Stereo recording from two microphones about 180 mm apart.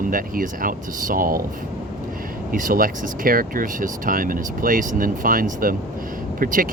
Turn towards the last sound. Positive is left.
turn(degrees=-50)  # may be behind; listen again after turning